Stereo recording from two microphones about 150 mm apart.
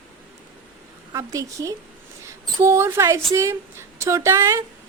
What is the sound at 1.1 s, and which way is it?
A woman's voice, 20° right (ahead or behind).